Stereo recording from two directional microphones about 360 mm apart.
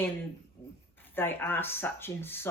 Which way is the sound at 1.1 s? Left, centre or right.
Centre.